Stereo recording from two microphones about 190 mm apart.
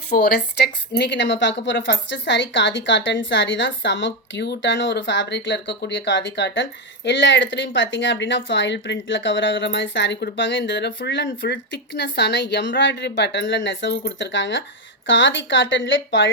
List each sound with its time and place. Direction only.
0.1 s speech: 60° left (ahead or behind); by 16.3 s 75° left (ahead or behind)